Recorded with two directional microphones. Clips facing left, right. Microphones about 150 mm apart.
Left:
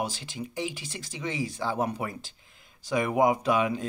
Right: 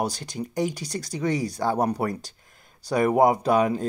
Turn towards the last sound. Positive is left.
turn(degrees=-40)  # may be behind; listen again after turning